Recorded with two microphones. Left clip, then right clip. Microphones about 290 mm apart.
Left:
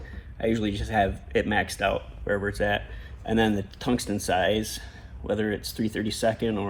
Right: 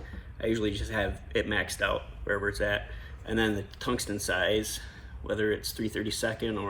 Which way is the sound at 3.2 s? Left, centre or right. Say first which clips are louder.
Left 4 dB; centre.